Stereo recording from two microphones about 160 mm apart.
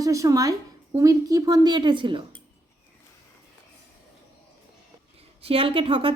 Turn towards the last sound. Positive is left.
turn(degrees=-35)  # may be behind; listen again after turning